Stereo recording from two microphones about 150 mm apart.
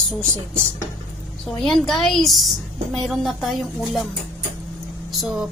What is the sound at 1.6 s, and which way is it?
A woman's voice, centre (ahead or behind).